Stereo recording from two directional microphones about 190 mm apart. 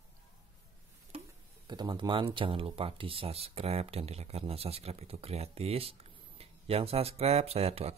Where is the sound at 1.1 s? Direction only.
30° right (ahead or behind).